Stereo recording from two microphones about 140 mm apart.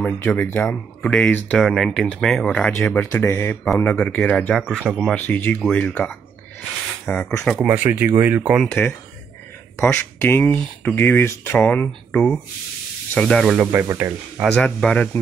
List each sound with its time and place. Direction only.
0.0 s speech: 10° left (ahead or behind)
3.0 s speech: 20° left (ahead or behind)
3.6 s speech: centre (ahead or behind)
4.8 s speech: 5° right (ahead or behind)
5.1 s speech: 10° left (ahead or behind)
7.5 s speech: 10° right (ahead or behind)
8.6 s speech: 15° left (ahead or behind)
13.7 s speech: 20° right (ahead or behind)
14.5 s speech: 5° left (ahead or behind)